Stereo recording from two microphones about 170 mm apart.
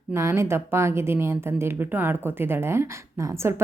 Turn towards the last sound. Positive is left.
turn(degrees=-15)  # may be behind; listen again after turning